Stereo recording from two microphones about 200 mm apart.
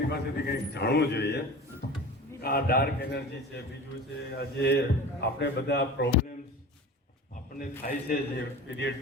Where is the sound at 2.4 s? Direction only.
50° left (ahead or behind).